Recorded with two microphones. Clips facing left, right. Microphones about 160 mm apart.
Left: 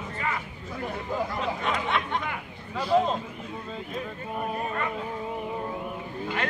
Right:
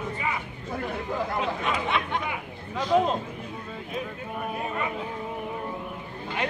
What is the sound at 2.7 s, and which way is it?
Speech, 5° left (ahead or behind).